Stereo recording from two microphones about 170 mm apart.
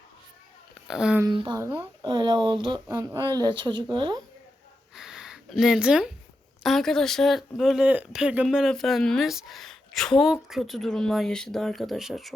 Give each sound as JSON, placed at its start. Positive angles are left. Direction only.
{"t": 0.9, "sound": "speech", "side_deg": -5}
{"t": 1.2, "sound": "a woman's voice", "side_deg": -20}
{"t": 2.0, "sound": "speech", "side_deg": -25}
{"t": 2.9, "sound": "speech", "side_deg": -20}
{"t": 4.9, "sound": "a sound", "side_deg": -5}
{"t": 6.6, "sound": "speech", "side_deg": 0}